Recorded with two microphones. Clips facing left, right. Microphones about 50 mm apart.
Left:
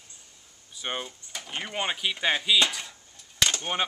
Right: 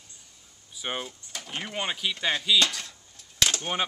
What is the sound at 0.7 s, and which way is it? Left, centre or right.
Speech, centre.